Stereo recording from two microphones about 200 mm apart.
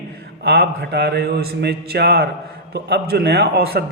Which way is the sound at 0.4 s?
55° right (ahead or behind).